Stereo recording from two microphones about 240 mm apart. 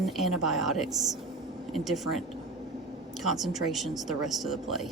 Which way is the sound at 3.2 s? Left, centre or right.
Centre.